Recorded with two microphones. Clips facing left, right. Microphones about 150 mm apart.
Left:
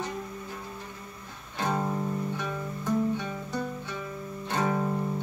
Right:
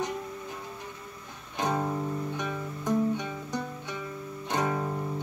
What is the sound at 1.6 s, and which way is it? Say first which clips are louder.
Music: even; 15° right (ahead or behind).